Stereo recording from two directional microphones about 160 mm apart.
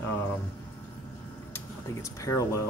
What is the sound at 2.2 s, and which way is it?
Speech, 20° left (ahead or behind).